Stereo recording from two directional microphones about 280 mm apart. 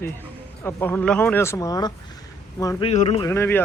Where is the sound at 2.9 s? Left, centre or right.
Left.